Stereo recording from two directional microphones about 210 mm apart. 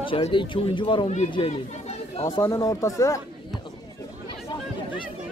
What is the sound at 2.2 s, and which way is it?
Speech, 15° left (ahead or behind).